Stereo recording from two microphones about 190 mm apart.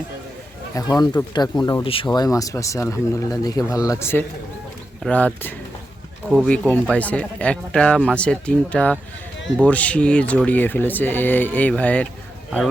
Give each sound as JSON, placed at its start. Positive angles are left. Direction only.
{"t": 0.9, "sound": "speech", "side_deg": 20}
{"t": 6.2, "sound": "speech", "side_deg": 0}